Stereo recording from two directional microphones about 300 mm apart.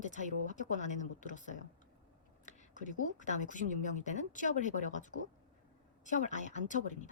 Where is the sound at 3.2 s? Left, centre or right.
Left.